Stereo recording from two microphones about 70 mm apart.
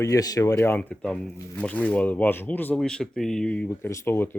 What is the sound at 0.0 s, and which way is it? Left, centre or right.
Speech, left.